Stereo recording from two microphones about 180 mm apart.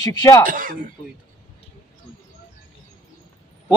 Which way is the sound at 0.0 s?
20° left (ahead or behind).